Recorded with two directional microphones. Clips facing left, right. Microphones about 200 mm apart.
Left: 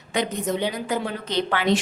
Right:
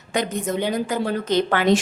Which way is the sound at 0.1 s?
45° right (ahead or behind).